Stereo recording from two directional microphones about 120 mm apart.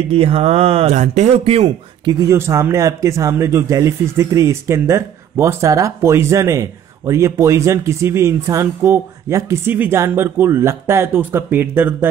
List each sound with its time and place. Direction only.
0.1 s speech: 55° right (ahead or behind)
2.3 s speech: 20° right (ahead or behind)